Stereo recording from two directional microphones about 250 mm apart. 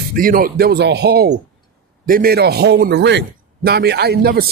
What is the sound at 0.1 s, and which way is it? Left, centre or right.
Speech, right.